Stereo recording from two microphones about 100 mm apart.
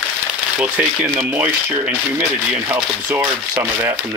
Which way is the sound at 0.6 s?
15° right (ahead or behind).